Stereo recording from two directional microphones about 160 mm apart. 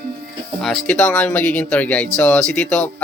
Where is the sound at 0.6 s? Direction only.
5° left (ahead or behind).